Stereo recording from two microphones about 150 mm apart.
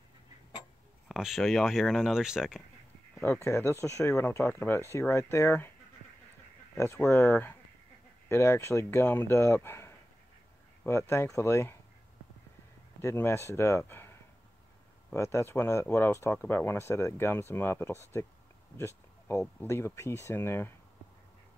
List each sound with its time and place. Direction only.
1.0 s speech: centre (ahead or behind)
3.4 s speech: 20° left (ahead or behind)
6.8 s speech: 20° left (ahead or behind)
7.2 s speech: 10° left (ahead or behind)
13.0 s speech: 15° left (ahead or behind)
15.1 s speech: 20° left (ahead or behind)
18.8 s a sound: 20° left (ahead or behind)
19.4 s speech: 15° left (ahead or behind)